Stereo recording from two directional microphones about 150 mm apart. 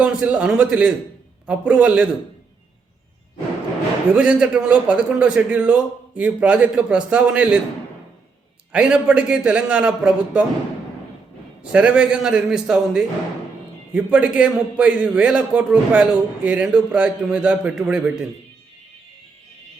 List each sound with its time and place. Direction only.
0.0 s a man's voice: 10° right (ahead or behind)
4.1 s a man's voice: 5° right (ahead or behind)
8.7 s a man's voice: 5° right (ahead or behind)
11.7 s a man's voice: 10° right (ahead or behind)